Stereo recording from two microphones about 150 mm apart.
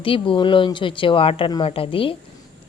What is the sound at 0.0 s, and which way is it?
Speech, 35° left (ahead or behind).